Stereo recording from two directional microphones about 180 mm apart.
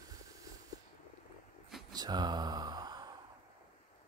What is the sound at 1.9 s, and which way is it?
Mantra, 20° right (ahead or behind).